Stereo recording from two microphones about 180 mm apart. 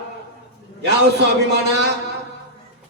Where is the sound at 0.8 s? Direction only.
65° right (ahead or behind).